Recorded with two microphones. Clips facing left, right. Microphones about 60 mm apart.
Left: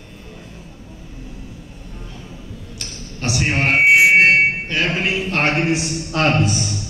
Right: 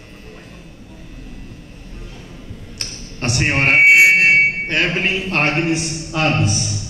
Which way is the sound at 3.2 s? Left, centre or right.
Right.